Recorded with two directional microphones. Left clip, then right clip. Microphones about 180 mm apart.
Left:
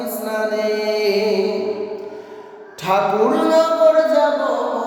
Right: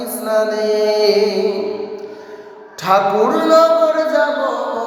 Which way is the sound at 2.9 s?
15° left (ahead or behind).